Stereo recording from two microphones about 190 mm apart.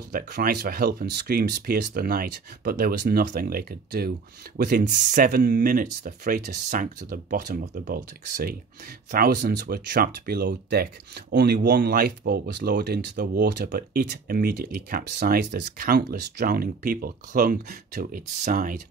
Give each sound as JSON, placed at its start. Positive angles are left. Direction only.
{"t": 0.1, "sound": "speech", "side_deg": -50}